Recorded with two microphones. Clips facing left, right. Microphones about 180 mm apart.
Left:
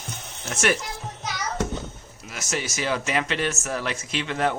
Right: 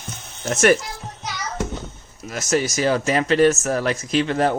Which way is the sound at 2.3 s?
40° right (ahead or behind).